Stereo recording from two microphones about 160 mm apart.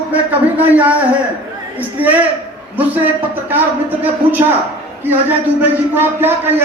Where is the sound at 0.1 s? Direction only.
10° right (ahead or behind).